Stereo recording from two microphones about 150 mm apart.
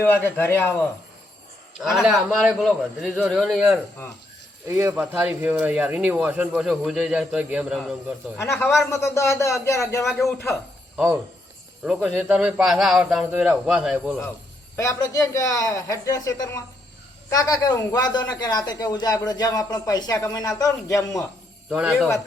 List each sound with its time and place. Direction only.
0.3 s a man's voice: 15° left (ahead or behind)
1.8 s a man's voice: 5° right (ahead or behind)
4.9 s speech: 10° right (ahead or behind)
8.4 s a man's voice: 15° left (ahead or behind)
12.0 s speech: 10° right (ahead or behind)
14.8 s a man's voice: 25° left (ahead or behind)
21.7 s a man's voice: 5° right (ahead or behind)